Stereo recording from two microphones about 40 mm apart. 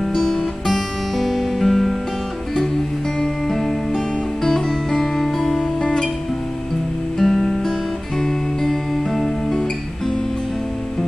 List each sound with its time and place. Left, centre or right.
0.0 s music: centre
0.7 s music: centre
3.4 s music: centre
7.2 s music: centre